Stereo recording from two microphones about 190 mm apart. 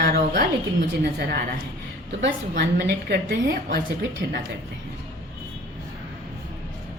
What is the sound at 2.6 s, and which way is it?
A woman's voice, 60° right (ahead or behind).